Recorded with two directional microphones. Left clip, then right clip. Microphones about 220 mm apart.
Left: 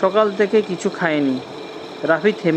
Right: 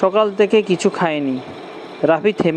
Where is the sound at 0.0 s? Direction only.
15° right (ahead or behind).